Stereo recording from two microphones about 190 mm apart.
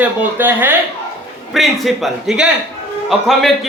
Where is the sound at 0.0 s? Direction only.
10° right (ahead or behind).